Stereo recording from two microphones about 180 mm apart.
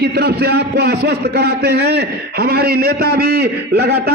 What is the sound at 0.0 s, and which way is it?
A man's voice, 60° right (ahead or behind).